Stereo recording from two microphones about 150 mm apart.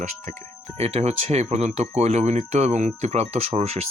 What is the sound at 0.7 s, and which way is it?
Speech, 45° right (ahead or behind).